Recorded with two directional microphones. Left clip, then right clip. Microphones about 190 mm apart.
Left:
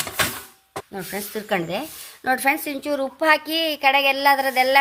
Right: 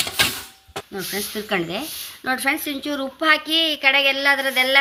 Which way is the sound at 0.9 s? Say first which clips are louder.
Right 3 dB; 40° left (ahead or behind).